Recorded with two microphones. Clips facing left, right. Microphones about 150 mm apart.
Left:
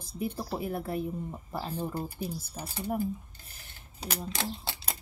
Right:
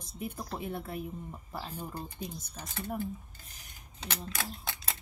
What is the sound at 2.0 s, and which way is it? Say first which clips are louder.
Speech: left 5 dB; 5° left (ahead or behind).